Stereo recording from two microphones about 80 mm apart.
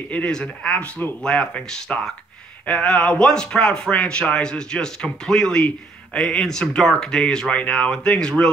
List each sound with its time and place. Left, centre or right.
0.1 s speech: centre